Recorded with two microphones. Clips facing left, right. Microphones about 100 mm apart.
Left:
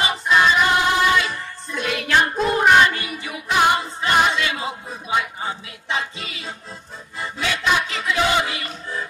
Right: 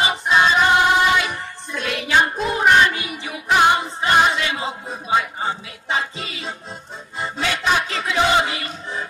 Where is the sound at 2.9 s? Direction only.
20° right (ahead or behind).